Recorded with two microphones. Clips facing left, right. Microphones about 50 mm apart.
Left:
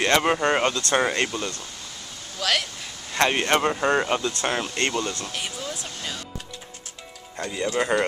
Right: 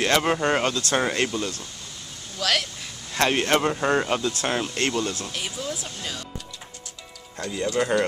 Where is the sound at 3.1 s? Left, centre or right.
Centre.